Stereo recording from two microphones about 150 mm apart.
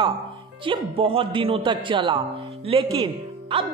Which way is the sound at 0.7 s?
40° right (ahead or behind).